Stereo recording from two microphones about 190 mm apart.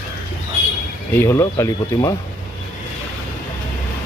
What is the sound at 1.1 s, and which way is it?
Speech, 15° left (ahead or behind).